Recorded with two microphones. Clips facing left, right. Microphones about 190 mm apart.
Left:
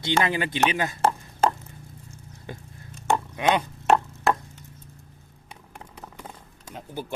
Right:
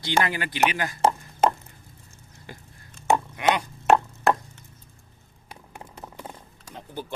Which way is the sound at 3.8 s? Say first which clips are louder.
Right 3 dB; centre (ahead or behind).